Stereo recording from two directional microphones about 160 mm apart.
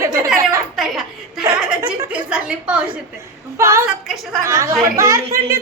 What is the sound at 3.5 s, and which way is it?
Speech, 15° right (ahead or behind).